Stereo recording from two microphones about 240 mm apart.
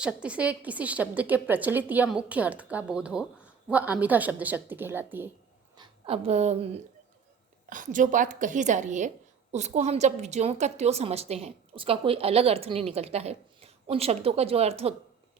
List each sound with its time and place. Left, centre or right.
0.0 s a woman's voice: centre
5.7 s a woman's voice: right
7.7 s a woman's voice: right